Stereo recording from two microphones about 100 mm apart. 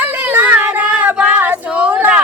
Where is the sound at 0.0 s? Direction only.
15° right (ahead or behind).